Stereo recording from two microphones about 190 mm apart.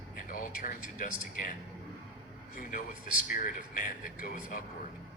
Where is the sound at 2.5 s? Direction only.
45° left (ahead or behind).